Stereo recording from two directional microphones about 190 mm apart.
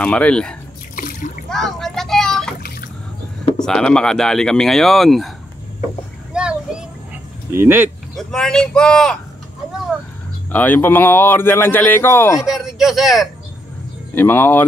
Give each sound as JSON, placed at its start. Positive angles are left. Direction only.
{"t": 0.0, "sound": "speech", "side_deg": 5}
{"t": 0.9, "sound": "water", "side_deg": 45}
{"t": 1.5, "sound": "vehicle", "side_deg": 0}
{"t": 3.5, "sound": "speech", "side_deg": 5}
{"t": 6.3, "sound": "a sound", "side_deg": -5}
{"t": 7.5, "sound": "speech", "side_deg": -10}
{"t": 8.2, "sound": "speech", "side_deg": 5}
{"t": 10.5, "sound": "speech", "side_deg": 10}
{"t": 12.4, "sound": "speech", "side_deg": 0}
{"t": 14.1, "sound": "speech", "side_deg": 10}